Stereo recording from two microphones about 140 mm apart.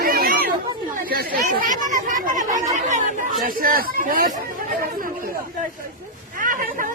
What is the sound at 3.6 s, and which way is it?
Speech, 85° right.